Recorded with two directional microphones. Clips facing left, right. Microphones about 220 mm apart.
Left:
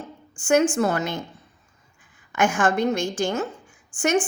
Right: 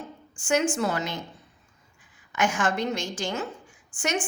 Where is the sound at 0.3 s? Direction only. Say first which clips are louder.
Left 5 dB; 50° left (ahead or behind).